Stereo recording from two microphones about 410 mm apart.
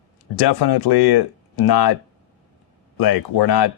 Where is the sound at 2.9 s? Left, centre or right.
Left.